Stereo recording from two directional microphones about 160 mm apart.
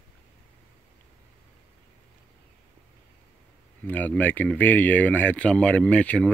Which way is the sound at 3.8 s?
10° left (ahead or behind).